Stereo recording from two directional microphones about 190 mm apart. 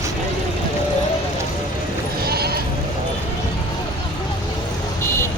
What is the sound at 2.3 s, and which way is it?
Sheep, 55° right (ahead or behind).